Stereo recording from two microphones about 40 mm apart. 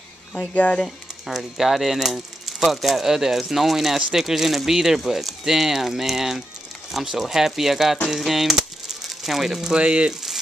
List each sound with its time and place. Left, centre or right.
0.8 s speech: centre
8.2 s a sound: centre
9.8 s speech: right